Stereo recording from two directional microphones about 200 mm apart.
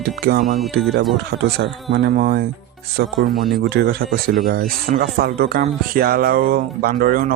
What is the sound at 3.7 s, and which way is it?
Speech, 50° right (ahead or behind).